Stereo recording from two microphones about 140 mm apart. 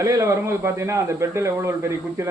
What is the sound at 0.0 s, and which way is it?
A man's voice, 20° right (ahead or behind).